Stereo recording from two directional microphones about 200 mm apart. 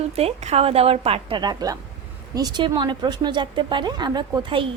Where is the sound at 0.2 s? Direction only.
30° right (ahead or behind).